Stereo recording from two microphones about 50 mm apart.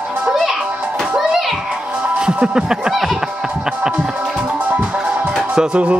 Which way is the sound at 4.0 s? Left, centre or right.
Right.